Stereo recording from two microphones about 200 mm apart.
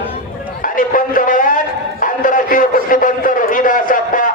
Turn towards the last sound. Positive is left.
turn(degrees=45)  # may be behind; listen again after turning